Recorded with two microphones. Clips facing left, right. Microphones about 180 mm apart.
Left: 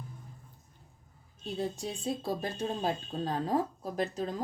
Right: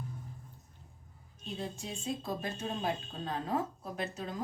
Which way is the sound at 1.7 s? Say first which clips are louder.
Left 3 dB; 35° left (ahead or behind).